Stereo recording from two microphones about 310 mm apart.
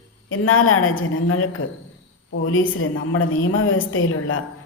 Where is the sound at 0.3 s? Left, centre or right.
Left.